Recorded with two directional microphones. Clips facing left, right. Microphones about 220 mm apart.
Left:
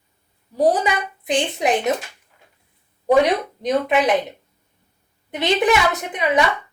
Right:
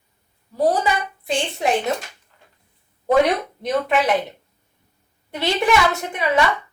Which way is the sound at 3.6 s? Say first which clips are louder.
Left 2 dB; 15° left (ahead or behind).